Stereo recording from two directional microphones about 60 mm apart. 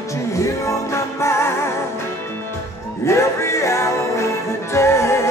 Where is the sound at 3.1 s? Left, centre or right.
Left.